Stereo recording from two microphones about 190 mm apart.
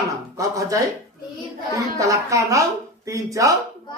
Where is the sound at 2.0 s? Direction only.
15° right (ahead or behind).